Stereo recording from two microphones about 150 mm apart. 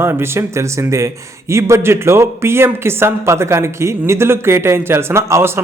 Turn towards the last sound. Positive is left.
turn(degrees=-15)  # may be behind; listen again after turning